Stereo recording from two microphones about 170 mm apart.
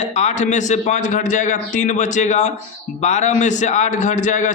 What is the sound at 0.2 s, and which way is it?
A man's voice, 45° left (ahead or behind).